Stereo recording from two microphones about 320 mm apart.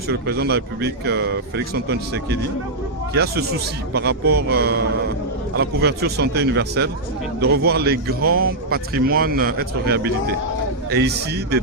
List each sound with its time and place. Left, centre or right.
0.1 s a man's voice: right